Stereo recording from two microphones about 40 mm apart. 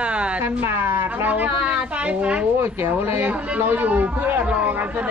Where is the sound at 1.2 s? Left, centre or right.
Right.